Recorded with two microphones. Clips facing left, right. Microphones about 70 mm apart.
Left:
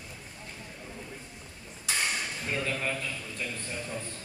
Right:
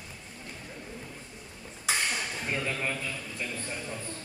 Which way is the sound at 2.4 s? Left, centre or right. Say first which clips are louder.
Left 1 dB; centre.